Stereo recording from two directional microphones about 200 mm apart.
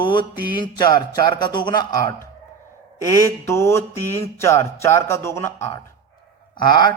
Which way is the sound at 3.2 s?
15° left (ahead or behind).